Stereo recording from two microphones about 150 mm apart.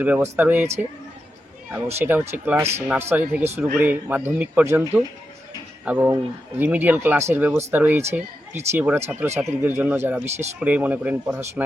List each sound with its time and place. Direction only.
0.0 s speech: 10° right (ahead or behind)
1.7 s speech: 15° right (ahead or behind)